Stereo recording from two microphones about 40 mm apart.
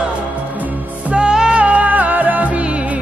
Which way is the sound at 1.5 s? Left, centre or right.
Right.